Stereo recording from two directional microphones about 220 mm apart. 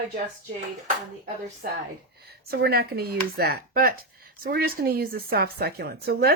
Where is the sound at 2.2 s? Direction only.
45° right (ahead or behind).